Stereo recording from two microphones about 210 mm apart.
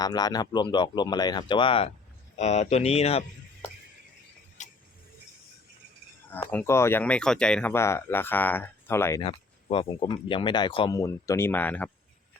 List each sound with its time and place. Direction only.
0.0 s speech: 20° left (ahead or behind)
4.6 s tick-tock: 35° left (ahead or behind)
6.5 s speech: 10° left (ahead or behind)
9.2 s speech: 25° left (ahead or behind); by 11.9 s 10° left (ahead or behind)